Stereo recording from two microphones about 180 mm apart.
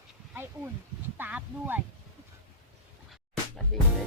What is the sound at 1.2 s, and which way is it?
Speech, 10° right (ahead or behind).